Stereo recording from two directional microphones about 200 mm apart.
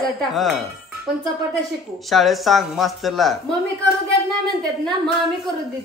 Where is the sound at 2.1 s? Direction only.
Centre (ahead or behind).